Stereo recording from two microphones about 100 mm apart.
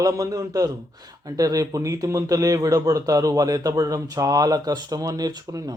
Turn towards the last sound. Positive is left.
turn(degrees=-40)  # may be behind; listen again after turning